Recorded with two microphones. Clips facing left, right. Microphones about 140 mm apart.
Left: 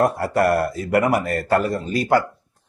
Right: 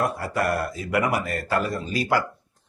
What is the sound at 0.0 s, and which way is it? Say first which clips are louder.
Speech: left 6 dB; 60° left (ahead or behind).